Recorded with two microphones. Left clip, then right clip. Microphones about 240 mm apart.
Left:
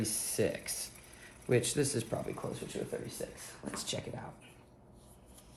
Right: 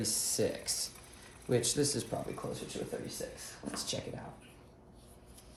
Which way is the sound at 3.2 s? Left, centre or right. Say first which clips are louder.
Even; left.